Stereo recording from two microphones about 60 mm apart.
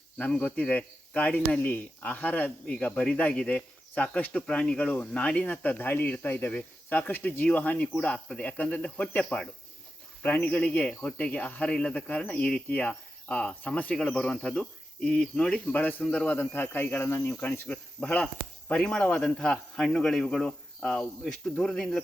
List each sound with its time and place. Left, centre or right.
0.2 s speech: left
2.7 s speech: centre; by 6.5 s left
6.5 s a man's voice: left
10.2 s speech: left; by 12.6 s centre
12.6 s speech: left
14.3 s a man's voice: centre
15.7 s a man's voice: left; by 22.0 s centre